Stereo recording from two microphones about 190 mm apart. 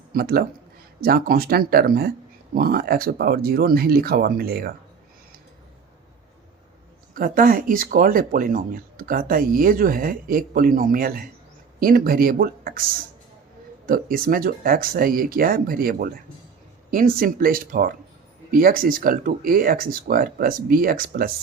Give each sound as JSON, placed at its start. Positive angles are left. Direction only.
{"t": 0.1, "sound": "speech", "side_deg": -50}
{"t": 7.1, "sound": "speech", "side_deg": -50}
{"t": 13.8, "sound": "speech", "side_deg": -50}